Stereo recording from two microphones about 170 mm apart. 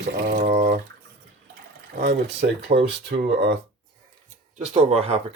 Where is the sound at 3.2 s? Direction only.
70° right (ahead or behind).